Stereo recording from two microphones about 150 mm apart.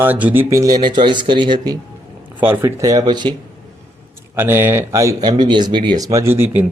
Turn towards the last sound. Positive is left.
turn(degrees=-15)  # may be behind; listen again after turning